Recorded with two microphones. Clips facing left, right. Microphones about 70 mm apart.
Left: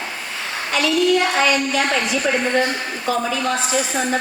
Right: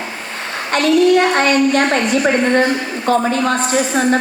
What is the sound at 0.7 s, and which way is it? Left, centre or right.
A woman's voice, right.